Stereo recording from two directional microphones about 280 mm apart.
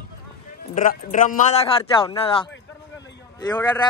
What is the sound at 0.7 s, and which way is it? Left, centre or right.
Speech, left.